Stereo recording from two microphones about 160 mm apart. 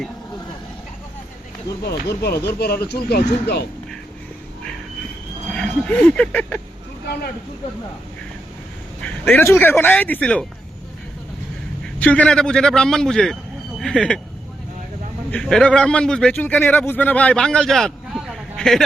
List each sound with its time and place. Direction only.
1.8 s speech: 90° left
5.5 s speech: 5° left (ahead or behind)
9.0 s speech: 10° left (ahead or behind)
11.9 s a man's voice: 10° left (ahead or behind)
15.3 s a man's voice: 5° left (ahead or behind)